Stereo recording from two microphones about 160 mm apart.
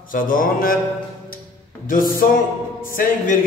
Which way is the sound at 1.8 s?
60° left (ahead or behind).